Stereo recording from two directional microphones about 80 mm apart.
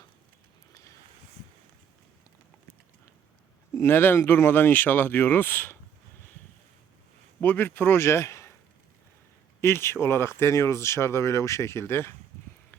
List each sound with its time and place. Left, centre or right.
3.8 s speech: left
7.4 s speech: left
9.6 s speech: left